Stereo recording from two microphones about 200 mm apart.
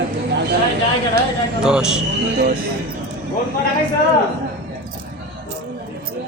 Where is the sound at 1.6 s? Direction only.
5° right (ahead or behind).